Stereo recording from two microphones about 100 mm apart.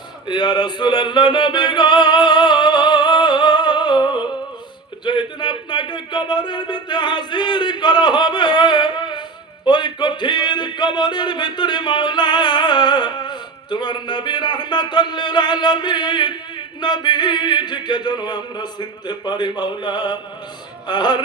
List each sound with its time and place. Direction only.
0.3 s music: 50° left (ahead or behind)
5.0 s a sound: 50° left (ahead or behind)
9.6 s a man's voice: 50° left (ahead or behind)